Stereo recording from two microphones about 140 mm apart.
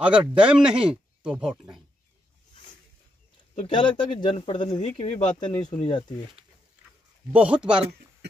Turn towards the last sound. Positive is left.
turn(degrees=-5)  # may be behind; listen again after turning